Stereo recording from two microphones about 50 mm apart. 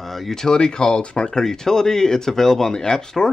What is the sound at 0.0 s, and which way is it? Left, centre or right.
Speech, centre.